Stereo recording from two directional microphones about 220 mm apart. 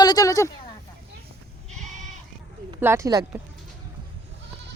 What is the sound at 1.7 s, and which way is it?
Goat, 35° right (ahead or behind).